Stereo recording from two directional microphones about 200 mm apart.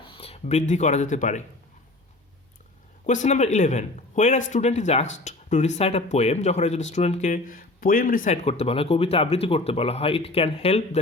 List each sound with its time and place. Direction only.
0.0 s a sound: 25° left (ahead or behind)
0.7 s speech: 35° left (ahead or behind)
3.1 s speech: 35° left (ahead or behind)